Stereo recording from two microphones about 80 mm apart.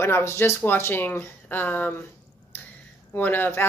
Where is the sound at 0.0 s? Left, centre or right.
Left.